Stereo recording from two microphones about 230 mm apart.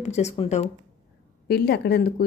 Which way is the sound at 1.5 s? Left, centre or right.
Left.